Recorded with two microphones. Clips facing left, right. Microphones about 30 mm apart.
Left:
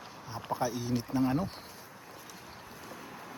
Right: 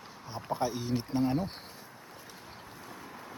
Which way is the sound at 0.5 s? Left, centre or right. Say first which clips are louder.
Even; centre.